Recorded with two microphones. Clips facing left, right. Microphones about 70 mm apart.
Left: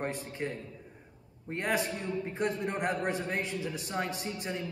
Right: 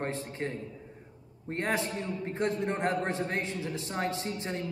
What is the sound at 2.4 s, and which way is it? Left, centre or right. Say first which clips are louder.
A man's voice: right 2 dB; right.